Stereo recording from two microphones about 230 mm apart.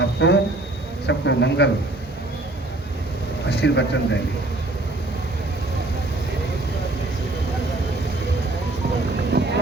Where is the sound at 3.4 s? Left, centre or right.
Left.